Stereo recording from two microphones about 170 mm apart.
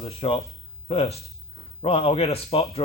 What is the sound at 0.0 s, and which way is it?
Speech, 35° left (ahead or behind).